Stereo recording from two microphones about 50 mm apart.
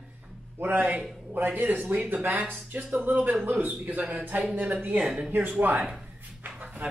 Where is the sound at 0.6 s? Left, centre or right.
Right.